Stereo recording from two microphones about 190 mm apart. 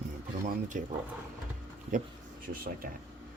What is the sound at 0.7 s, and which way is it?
Speech, 40° right (ahead or behind).